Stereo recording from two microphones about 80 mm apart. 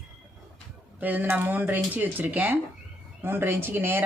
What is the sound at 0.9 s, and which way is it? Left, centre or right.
Speech, right.